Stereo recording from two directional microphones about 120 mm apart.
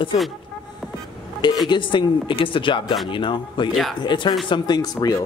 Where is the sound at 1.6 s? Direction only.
45° left (ahead or behind).